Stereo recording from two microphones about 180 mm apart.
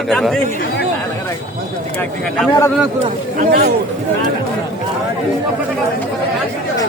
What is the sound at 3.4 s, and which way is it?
Speech, 60° right (ahead or behind).